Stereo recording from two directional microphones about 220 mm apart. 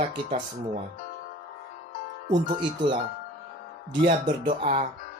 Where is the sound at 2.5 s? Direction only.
20° right (ahead or behind).